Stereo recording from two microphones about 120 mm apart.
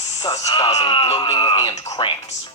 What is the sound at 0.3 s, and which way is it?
Speech, 35° left (ahead or behind).